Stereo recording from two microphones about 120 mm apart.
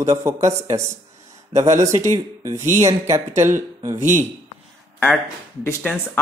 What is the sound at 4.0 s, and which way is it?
Speech, 70° right (ahead or behind).